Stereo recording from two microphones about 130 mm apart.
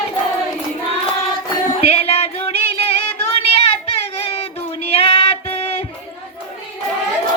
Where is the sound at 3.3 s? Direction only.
50° left (ahead or behind).